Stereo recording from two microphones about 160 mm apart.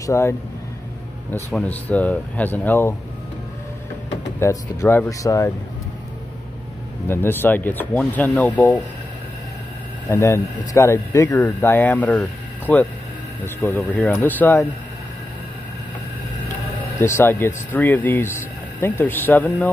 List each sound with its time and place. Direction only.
0.0 s speech: 20° left (ahead or behind)
1.5 s speech: 5° left (ahead or behind)
4.4 s speech: 15° left (ahead or behind)
7.1 s speech: 15° left (ahead or behind)
10.0 s speech: 20° left (ahead or behind)
17.0 s speech: 15° left (ahead or behind)